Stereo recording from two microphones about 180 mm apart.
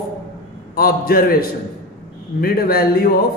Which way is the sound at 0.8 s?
55° left (ahead or behind).